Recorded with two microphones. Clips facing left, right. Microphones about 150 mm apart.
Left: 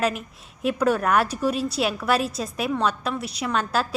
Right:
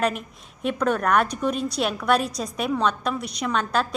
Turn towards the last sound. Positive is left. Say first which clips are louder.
# even
turn(degrees=5)  # may be behind; listen again after turning